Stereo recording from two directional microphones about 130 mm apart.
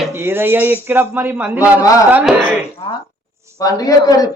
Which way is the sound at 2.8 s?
45° left (ahead or behind).